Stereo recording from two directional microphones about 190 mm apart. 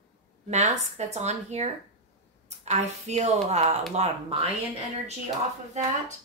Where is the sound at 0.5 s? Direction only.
35° right (ahead or behind).